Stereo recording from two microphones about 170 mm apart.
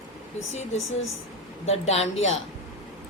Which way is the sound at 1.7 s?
40° left (ahead or behind).